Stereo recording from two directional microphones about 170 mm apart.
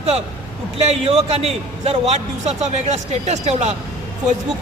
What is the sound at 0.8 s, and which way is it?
A man's voice, 35° right (ahead or behind).